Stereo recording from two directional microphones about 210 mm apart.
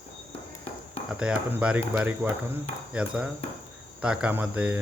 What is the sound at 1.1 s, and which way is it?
Speech, 5° right (ahead or behind).